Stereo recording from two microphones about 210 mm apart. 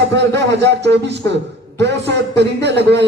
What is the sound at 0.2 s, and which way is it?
A man's voice, 55° right (ahead or behind).